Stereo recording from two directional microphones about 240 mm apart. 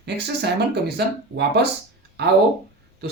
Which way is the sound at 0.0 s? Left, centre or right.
Right.